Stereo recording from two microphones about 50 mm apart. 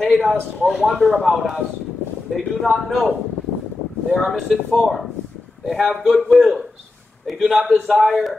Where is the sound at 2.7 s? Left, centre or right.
Centre.